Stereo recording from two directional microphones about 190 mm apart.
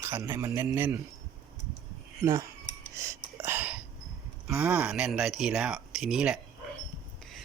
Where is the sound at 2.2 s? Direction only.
15° right (ahead or behind).